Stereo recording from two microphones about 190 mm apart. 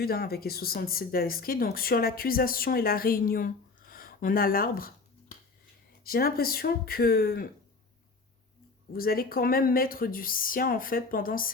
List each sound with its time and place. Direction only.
0.0 s speech: 55° left (ahead or behind)
6.1 s speech: 50° left (ahead or behind)
8.9 s speech: 50° left (ahead or behind)